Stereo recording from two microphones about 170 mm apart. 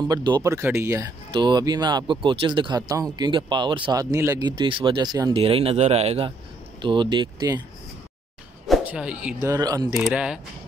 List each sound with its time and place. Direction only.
0.1 s speech: 25° right (ahead or behind)
5.4 s speech: 35° right (ahead or behind)
8.6 s a sound: 5° right (ahead or behind)
9.4 s speech: 20° right (ahead or behind)
9.9 s speech: 5° right (ahead or behind)